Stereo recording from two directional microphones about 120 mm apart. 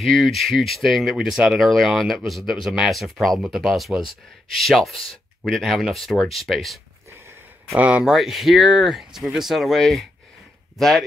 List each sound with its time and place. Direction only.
0.0 s speech: centre (ahead or behind)
7.8 s speech: 5° right (ahead or behind)